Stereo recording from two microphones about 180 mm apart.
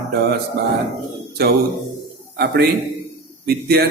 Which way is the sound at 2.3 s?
65° right (ahead or behind).